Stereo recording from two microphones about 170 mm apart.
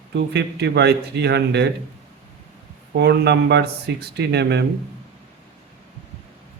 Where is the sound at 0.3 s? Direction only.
75° right (ahead or behind).